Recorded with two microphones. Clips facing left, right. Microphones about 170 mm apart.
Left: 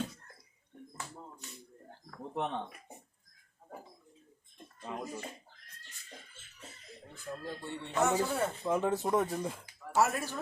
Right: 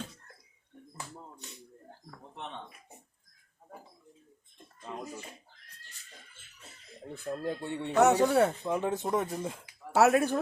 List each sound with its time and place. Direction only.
2.3 s speech: 60° left (ahead or behind)
4.9 s speech: 5° left (ahead or behind)
7.4 s speech: 65° right (ahead or behind)
8.6 s speech: centre (ahead or behind)
9.9 s speech: 70° right (ahead or behind)